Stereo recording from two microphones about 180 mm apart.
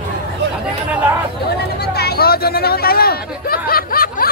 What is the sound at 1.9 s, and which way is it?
Chatter, 60° left (ahead or behind).